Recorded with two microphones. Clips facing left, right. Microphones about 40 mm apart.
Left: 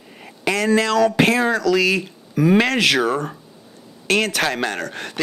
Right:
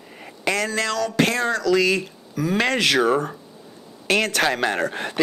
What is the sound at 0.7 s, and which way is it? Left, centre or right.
Speech, centre.